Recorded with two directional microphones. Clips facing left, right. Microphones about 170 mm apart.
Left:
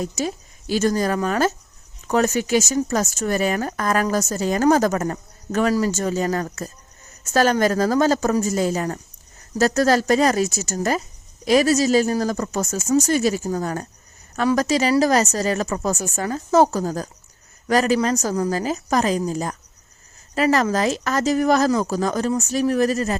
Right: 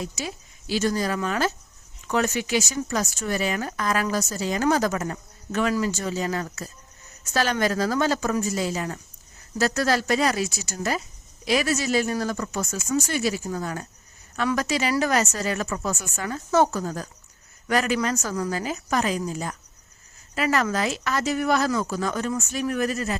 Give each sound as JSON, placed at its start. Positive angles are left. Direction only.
{"t": 0.0, "sound": "speech", "side_deg": 45}